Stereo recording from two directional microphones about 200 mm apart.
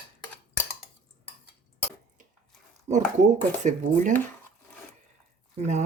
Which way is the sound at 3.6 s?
40° right (ahead or behind).